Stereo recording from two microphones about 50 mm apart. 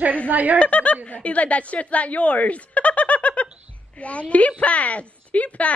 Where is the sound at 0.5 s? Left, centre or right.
Left.